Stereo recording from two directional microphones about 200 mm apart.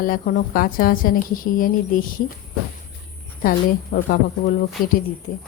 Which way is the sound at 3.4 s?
45° left (ahead or behind).